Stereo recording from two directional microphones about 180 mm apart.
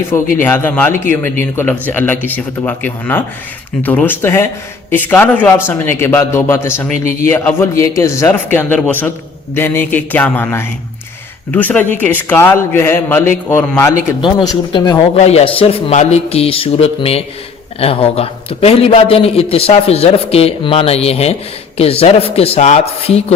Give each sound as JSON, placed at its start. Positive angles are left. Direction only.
{"t": 0.1, "sound": "a man's voice", "side_deg": 10}
{"t": 14.2, "sound": "a man's voice", "side_deg": 25}